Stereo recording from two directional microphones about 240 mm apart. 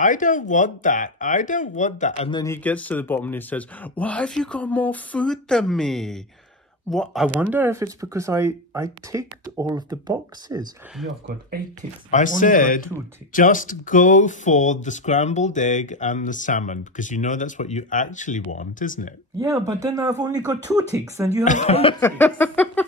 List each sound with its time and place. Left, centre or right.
0.0 s speech: left
2.4 s speech: centre
12.1 s speech: left
19.4 s speech: centre
21.5 s speech: left
22.0 s a sound: centre